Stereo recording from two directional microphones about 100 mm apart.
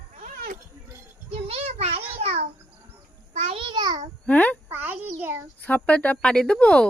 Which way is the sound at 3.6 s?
50° right (ahead or behind).